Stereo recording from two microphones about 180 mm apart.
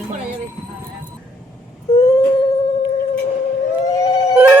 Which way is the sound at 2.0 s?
20° left (ahead or behind).